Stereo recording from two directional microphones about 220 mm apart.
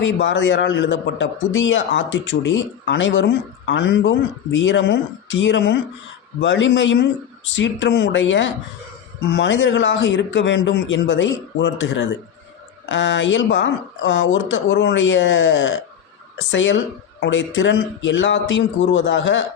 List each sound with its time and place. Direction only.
0.0 s speech: 55° left (ahead or behind)